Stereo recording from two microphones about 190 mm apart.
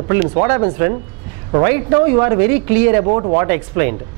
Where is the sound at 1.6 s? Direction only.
15° right (ahead or behind).